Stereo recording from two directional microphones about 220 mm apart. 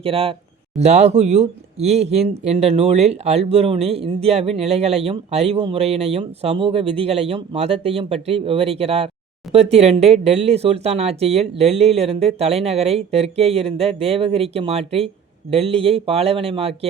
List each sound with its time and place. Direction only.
0.0 s speech: 25° right (ahead or behind)